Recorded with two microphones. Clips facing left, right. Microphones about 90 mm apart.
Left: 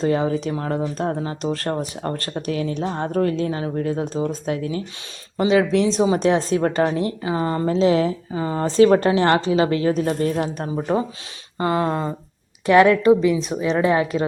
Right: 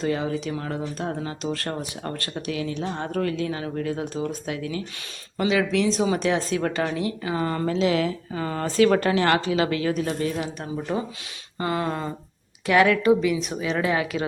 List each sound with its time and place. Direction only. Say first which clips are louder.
0.0 s speech: left 5 dB; 35° left (ahead or behind)